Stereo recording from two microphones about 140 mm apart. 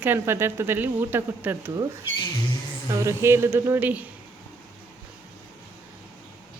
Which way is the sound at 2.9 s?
20° right (ahead or behind).